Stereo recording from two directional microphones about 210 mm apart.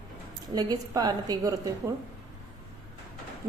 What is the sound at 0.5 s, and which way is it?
A woman's voice, 20° right (ahead or behind).